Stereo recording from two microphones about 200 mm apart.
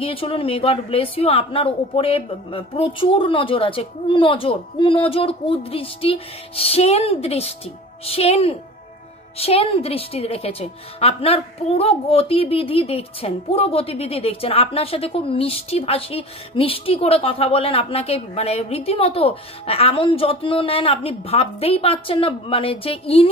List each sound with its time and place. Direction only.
0.0 s a woman's voice: 25° left (ahead or behind)